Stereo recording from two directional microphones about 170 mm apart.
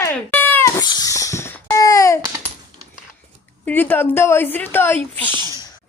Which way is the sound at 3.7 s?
10° left (ahead or behind).